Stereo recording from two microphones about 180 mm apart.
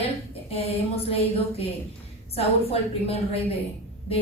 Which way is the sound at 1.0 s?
30° left (ahead or behind).